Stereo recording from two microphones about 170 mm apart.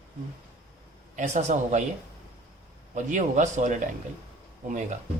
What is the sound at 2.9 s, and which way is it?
Speech, 45° right (ahead or behind).